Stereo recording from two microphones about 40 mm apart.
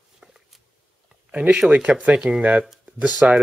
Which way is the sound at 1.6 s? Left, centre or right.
Right.